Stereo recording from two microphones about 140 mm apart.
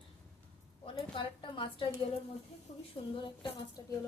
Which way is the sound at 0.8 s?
35° left (ahead or behind).